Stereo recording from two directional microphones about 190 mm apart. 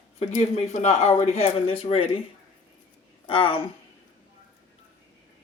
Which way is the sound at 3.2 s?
30° left (ahead or behind).